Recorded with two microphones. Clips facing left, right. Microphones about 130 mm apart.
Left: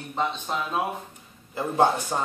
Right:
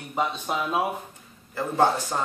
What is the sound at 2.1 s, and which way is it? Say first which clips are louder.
Speech: even; 10° left (ahead or behind).